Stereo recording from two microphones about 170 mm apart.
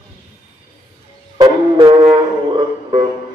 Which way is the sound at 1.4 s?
25° right (ahead or behind).